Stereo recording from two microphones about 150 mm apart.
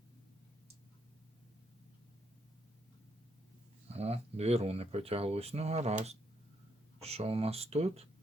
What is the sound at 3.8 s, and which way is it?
Speech, 45° right (ahead or behind).